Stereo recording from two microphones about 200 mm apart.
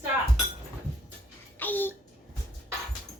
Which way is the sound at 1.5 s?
10° left (ahead or behind).